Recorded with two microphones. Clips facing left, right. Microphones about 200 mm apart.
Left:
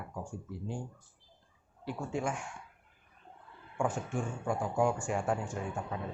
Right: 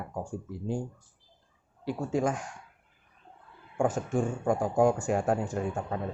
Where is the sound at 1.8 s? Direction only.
40° right (ahead or behind).